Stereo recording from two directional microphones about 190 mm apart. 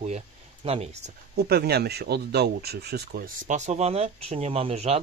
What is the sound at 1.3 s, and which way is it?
Speech, 55° right (ahead or behind).